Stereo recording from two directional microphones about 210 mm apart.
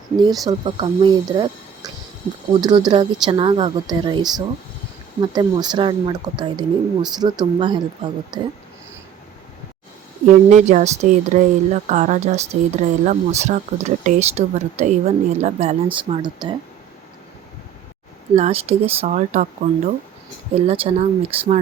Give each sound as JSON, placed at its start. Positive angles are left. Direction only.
{"t": 0.4, "sound": "speech", "side_deg": -20}
{"t": 10.2, "sound": "speech", "side_deg": -35}
{"t": 18.3, "sound": "speech", "side_deg": -30}